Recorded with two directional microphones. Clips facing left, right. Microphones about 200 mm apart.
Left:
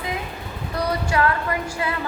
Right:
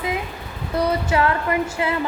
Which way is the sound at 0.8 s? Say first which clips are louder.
Right 1 dB; 25° right (ahead or behind).